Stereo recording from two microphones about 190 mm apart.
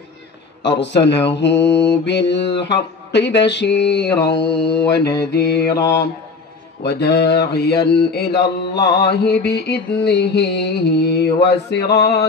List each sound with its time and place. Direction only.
0.7 s mantra: 65° left (ahead or behind)
6.8 s mantra: 65° left (ahead or behind)